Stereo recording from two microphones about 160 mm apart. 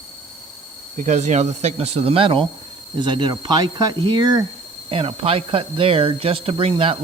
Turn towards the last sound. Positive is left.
turn(degrees=-35)  # may be behind; listen again after turning